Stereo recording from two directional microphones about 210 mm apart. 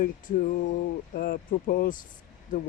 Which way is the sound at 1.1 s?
45° left (ahead or behind).